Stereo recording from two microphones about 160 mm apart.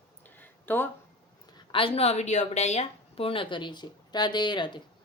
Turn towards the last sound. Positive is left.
turn(degrees=30)  # may be behind; listen again after turning